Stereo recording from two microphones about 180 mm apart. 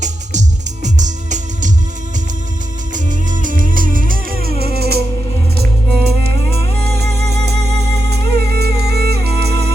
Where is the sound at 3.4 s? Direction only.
50° right (ahead or behind).